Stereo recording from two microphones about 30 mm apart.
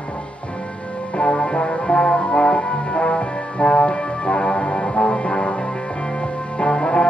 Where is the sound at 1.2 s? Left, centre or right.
Left.